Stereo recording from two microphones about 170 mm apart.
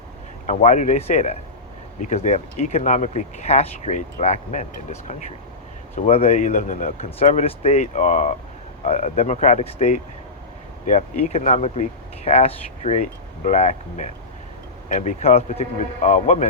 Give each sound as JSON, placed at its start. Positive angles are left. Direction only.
{"t": 0.4, "sound": "speech", "side_deg": 40}